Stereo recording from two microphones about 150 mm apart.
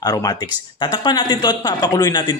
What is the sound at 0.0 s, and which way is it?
A man's voice, 25° left (ahead or behind).